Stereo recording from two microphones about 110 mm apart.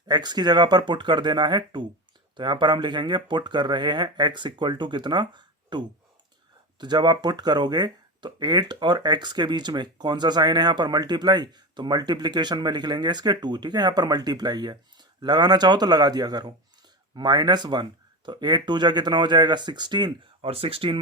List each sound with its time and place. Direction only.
0.1 s speech: 40° right (ahead or behind)
20.4 s speech: 60° right (ahead or behind)